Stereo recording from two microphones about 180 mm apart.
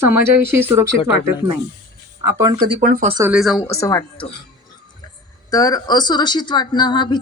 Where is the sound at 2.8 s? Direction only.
50° right (ahead or behind).